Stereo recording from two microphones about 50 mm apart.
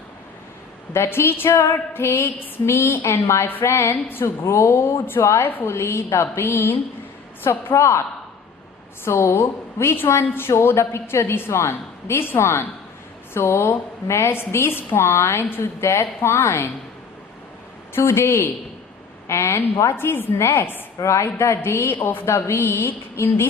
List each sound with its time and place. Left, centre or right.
0.9 s a woman's voice: left
3.9 s a woman's voice: left
7.5 s a woman's voice: left
7.8 s a man's voice: left
9.0 s a woman's voice: left
9.4 s a woman's voice: left
9.9 s a woman's voice: left
14.1 s a woman's voice: left
14.7 s a woman's voice: left
14.9 s a woman's voice: left
17.9 s a woman's voice: left
21.0 s a man's voice: left
21.3 s a woman's voice: left
22.4 s a woman's voice: left